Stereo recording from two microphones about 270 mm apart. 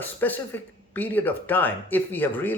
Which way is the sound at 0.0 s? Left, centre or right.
Centre.